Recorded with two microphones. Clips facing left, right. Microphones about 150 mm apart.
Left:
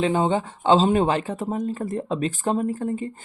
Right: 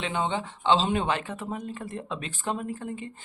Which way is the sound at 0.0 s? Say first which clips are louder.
Left 8 dB; 40° left (ahead or behind).